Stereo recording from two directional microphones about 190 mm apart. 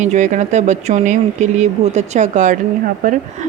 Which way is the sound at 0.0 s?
40° right (ahead or behind).